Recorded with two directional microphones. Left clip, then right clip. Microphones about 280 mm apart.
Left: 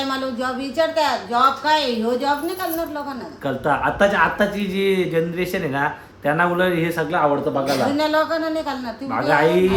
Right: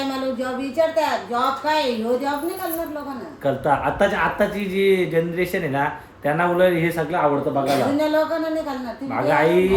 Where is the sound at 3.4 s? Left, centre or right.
Centre.